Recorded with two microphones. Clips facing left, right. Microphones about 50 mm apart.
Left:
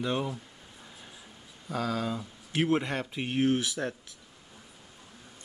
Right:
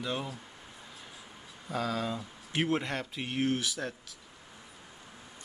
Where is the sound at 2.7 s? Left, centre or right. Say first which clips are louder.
Left 3 dB; centre.